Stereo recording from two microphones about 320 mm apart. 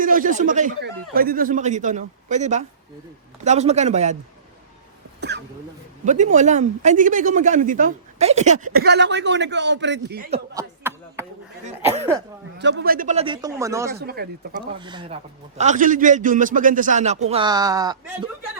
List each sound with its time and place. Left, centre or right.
0.0 s speech: right
6.1 s speech: right
10.3 s a sound: centre
11.6 s speech: right
12.5 s speech: right; by 13.9 s centre
13.9 s speech: right
14.8 s speech: centre